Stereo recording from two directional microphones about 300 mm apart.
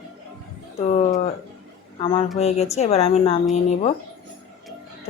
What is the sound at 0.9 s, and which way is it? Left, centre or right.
A woman's voice, left.